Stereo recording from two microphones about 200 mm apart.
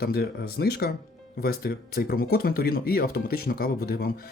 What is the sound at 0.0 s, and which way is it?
Speech, 50° left (ahead or behind).